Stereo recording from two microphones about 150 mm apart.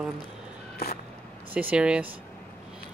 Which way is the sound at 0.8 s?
90° left.